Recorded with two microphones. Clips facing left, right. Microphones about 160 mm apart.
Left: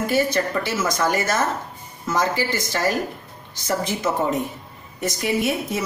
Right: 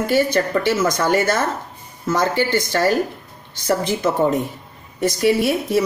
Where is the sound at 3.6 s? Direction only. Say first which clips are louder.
Right 4 dB; 30° right (ahead or behind).